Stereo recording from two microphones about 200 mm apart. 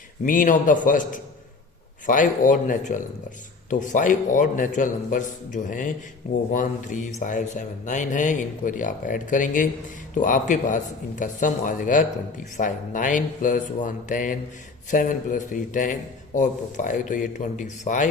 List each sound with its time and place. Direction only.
0.3 s a man's voice: 40° left (ahead or behind)